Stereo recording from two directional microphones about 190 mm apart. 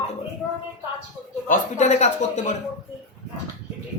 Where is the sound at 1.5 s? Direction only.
40° left (ahead or behind).